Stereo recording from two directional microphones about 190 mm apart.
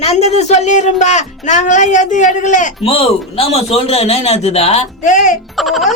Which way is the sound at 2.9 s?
30° left (ahead or behind).